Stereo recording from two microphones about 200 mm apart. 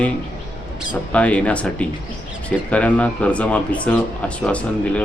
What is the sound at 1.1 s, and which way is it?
Speech, 5° left (ahead or behind).